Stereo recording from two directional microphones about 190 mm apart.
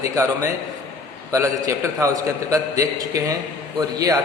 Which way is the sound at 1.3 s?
15° right (ahead or behind).